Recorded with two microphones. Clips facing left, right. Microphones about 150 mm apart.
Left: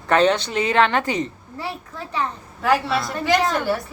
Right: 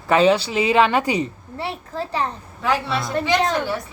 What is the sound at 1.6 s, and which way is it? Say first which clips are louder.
Speech: right 4 dB; 30° right (ahead or behind).